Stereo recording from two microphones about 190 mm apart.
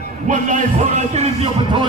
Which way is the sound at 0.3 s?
40° right (ahead or behind).